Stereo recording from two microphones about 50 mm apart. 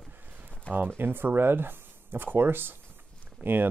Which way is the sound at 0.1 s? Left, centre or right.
Right.